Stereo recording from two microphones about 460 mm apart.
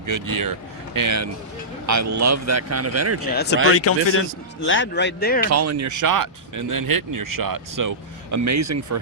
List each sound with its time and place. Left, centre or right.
0.0 s speech: right
3.8 s speech: left
5.5 s speech: right